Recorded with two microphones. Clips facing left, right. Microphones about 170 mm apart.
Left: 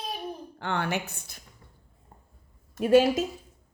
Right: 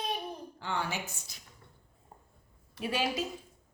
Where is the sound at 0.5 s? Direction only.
60° left (ahead or behind).